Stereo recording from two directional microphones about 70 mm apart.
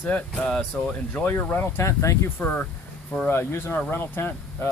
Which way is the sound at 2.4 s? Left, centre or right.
Left.